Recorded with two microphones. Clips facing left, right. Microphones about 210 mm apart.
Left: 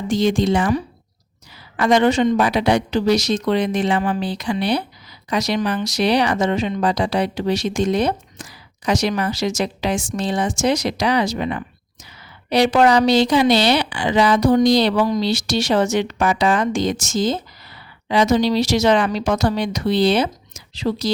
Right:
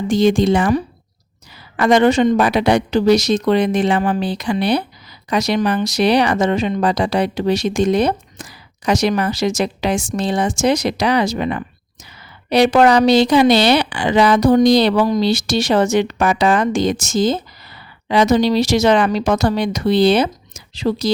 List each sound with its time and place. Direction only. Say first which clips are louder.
0.1 s speech: right 3 dB; 55° right (ahead or behind)